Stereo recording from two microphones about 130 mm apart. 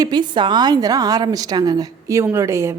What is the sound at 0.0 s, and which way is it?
A woman's voice, 35° right (ahead or behind).